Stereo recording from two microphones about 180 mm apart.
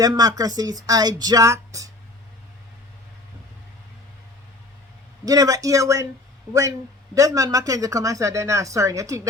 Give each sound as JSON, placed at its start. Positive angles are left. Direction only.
{"t": 0.0, "sound": "speech", "side_deg": -20}
{"t": 5.2, "sound": "speech", "side_deg": -20}